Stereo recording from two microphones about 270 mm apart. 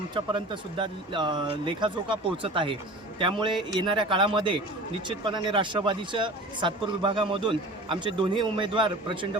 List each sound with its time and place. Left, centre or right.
0.3 s speech: centre